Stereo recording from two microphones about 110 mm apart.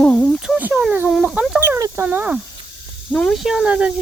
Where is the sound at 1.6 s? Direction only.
25° right (ahead or behind).